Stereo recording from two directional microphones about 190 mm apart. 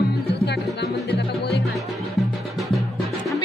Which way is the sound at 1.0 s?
60° left (ahead or behind).